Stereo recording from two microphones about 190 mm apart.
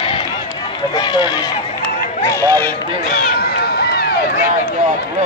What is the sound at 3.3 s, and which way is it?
Run, 55° left (ahead or behind).